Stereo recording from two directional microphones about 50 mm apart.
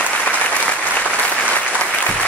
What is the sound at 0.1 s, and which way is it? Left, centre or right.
Applause, left.